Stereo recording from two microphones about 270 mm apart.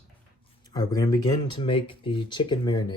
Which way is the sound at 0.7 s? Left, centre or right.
Centre.